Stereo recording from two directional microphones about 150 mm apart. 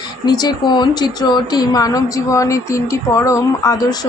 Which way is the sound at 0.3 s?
30° left (ahead or behind).